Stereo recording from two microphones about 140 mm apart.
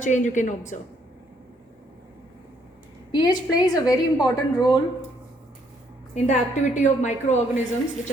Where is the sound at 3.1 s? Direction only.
30° left (ahead or behind).